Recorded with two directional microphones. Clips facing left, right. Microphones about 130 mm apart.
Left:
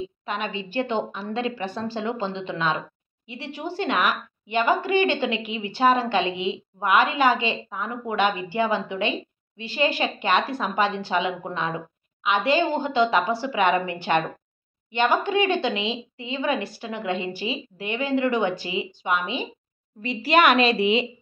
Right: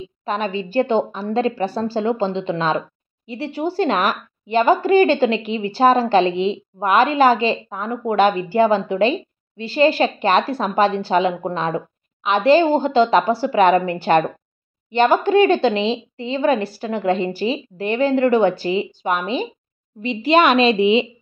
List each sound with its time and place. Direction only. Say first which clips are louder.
0.2 s a woman's voice: right 9 dB; 35° right (ahead or behind)
20.0 s a woman's voice: right 4 dB; 20° right (ahead or behind)